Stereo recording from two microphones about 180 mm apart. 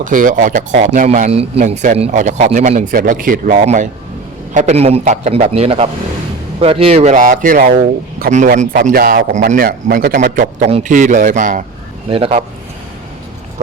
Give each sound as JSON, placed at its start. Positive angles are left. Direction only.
{"t": 0.0, "sound": "a man's voice", "side_deg": -50}
{"t": 1.3, "sound": "a man's voice", "side_deg": -35}
{"t": 12.1, "sound": "a man's voice", "side_deg": -30}